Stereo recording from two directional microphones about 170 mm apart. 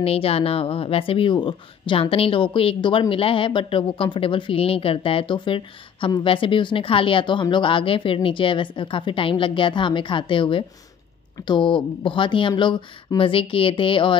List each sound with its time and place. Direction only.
0.0 s speech: 35° left (ahead or behind)